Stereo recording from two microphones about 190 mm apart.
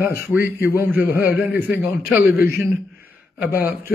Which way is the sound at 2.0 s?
5° right (ahead or behind).